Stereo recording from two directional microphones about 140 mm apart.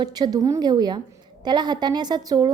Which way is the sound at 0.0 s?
30° right (ahead or behind).